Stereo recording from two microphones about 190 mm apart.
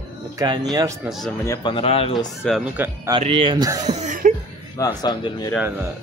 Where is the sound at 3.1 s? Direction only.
30° right (ahead or behind).